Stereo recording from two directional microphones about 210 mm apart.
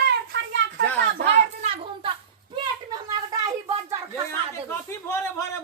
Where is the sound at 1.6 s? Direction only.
25° right (ahead or behind).